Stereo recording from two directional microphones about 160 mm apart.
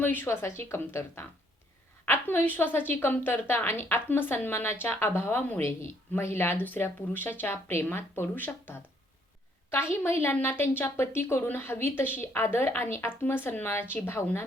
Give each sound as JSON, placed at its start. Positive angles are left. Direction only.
{"t": 0.0, "sound": "a woman's voice", "side_deg": 15}